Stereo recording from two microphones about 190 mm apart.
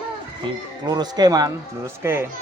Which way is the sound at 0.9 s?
20° right (ahead or behind).